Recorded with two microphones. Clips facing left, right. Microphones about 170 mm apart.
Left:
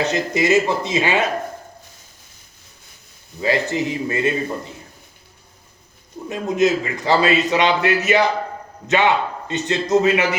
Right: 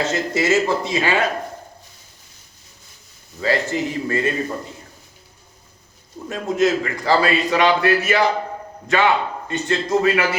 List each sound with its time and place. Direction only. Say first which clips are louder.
0.0 s a man's voice: left 1 dB; 20° left (ahead or behind)
3.4 s a man's voice: left 1 dB; 20° left (ahead or behind)
6.2 s a man's voice: left 1 dB; 20° left (ahead or behind)